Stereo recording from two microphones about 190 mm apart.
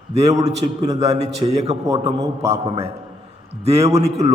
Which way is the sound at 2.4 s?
30° right (ahead or behind).